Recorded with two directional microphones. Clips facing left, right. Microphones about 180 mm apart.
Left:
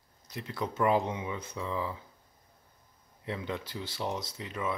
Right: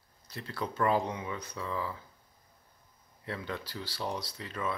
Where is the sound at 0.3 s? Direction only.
20° left (ahead or behind).